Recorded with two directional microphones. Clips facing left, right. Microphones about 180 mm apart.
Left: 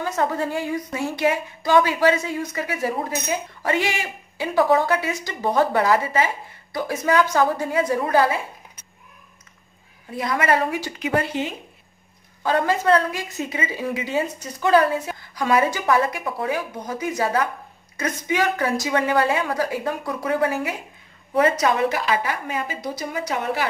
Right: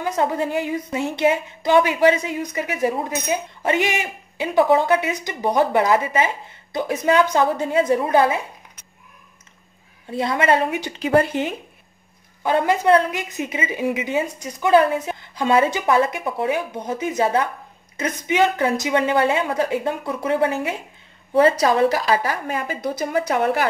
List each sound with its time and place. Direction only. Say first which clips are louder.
0.0 s a woman's voice: right 2 dB; 15° right (ahead or behind)
10.1 s a woman's voice: right 2 dB; 25° right (ahead or behind)
11.0 s a woman's voice: right 6 dB; 35° right (ahead or behind)
12.4 s a woman's voice: right 2 dB; 20° right (ahead or behind); by 23.7 s 50° right (ahead or behind)